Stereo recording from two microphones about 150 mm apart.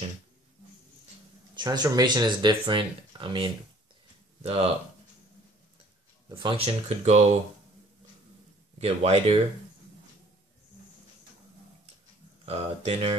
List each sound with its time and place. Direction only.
1.5 s speech: 30° right (ahead or behind)
4.4 s speech: 45° right (ahead or behind)
6.2 s speech: 35° right (ahead or behind)
8.7 s speech: 40° right (ahead or behind)
12.4 s speech: 40° right (ahead or behind)